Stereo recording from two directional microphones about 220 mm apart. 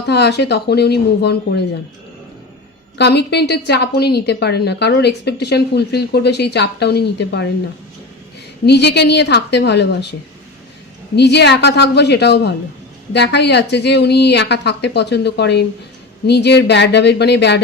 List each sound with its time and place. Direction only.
0.1 s a woman's voice: 50° left (ahead or behind)
3.0 s a woman's voice: 50° left (ahead or behind)
8.6 s a woman's voice: 50° left (ahead or behind)
11.1 s a woman's voice: 50° left (ahead or behind)